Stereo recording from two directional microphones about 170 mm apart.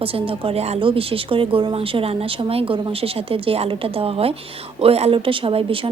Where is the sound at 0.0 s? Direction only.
35° right (ahead or behind).